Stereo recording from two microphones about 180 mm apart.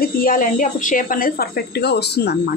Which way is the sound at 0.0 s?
50° left (ahead or behind).